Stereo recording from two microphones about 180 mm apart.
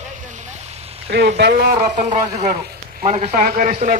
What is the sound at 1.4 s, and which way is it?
Speech, 65° right (ahead or behind).